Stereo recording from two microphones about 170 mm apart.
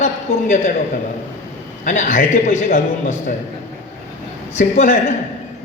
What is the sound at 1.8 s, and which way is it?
A man's voice, 45° left (ahead or behind).